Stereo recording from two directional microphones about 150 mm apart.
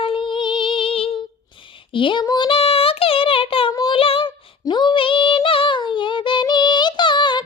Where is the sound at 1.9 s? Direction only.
35° left (ahead or behind).